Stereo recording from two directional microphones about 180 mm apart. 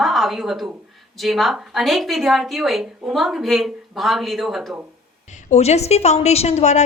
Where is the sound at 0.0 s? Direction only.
Centre (ahead or behind).